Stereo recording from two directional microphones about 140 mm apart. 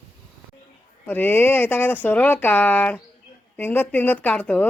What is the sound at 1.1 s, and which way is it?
Speech, 15° left (ahead or behind).